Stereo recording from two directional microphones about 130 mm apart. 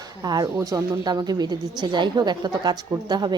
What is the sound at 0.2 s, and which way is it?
Speech, 30° right (ahead or behind).